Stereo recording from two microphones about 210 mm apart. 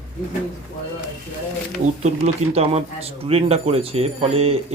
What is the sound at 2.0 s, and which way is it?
Speech, 30° right (ahead or behind).